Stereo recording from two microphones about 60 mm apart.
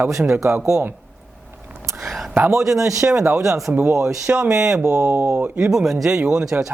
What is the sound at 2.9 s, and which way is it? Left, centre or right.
Speech, right.